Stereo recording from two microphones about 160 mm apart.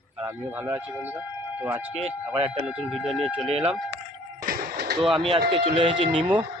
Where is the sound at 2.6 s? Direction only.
5° right (ahead or behind).